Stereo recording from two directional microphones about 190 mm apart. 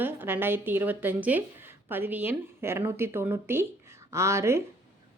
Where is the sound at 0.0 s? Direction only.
10° right (ahead or behind).